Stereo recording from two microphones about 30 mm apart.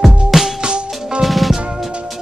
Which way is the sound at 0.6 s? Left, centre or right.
Right.